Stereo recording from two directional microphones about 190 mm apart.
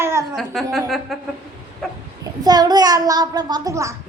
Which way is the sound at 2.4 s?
20° right (ahead or behind).